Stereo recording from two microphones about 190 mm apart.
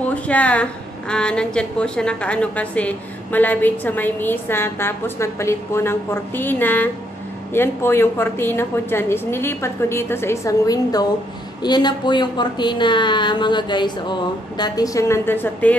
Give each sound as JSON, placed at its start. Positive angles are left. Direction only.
{"t": 0.1, "sound": "a woman's voice", "side_deg": 5}